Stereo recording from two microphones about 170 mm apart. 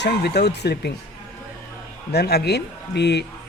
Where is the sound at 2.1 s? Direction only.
70° left (ahead or behind).